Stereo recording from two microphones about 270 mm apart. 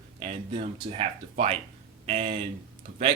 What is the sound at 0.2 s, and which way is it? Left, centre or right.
Speech, right.